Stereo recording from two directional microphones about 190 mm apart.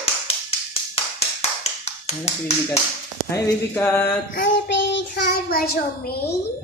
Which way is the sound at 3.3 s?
15° left (ahead or behind).